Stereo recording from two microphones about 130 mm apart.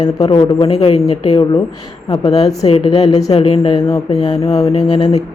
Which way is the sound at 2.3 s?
55° left (ahead or behind).